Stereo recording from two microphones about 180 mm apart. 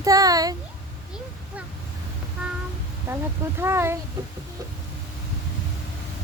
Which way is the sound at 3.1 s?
15° right (ahead or behind).